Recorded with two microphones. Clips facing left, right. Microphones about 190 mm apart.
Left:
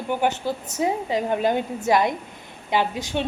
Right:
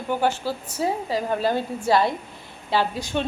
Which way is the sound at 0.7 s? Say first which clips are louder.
Left 1 dB; 20° left (ahead or behind).